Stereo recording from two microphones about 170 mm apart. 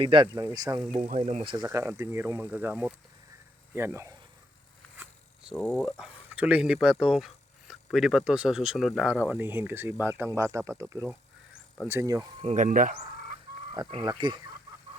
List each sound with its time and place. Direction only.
0.0 s speech: 30° right (ahead or behind)
0.9 s speech: 45° right (ahead or behind)
1.5 s speech: 20° right (ahead or behind)
4.9 s speech: 5° right (ahead or behind)
9.3 s speech: 15° right (ahead or behind)
12.4 s speech: 45° right (ahead or behind)
13.7 s speech: 25° right (ahead or behind)